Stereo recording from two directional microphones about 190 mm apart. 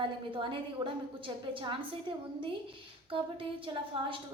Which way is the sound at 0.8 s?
25° right (ahead or behind).